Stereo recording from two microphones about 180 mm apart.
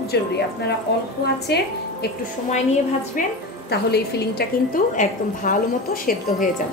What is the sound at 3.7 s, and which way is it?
A woman's voice, 60° left (ahead or behind).